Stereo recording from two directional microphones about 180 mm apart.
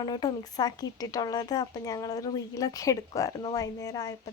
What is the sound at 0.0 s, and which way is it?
Speech, 20° left (ahead or behind).